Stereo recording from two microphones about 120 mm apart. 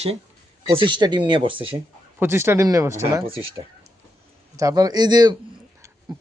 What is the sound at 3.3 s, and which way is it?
Speech, 50° right (ahead or behind).